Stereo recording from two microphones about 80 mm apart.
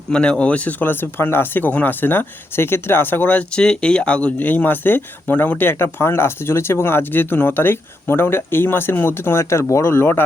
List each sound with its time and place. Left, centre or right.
0.1 s speech: centre; by 10.2 s left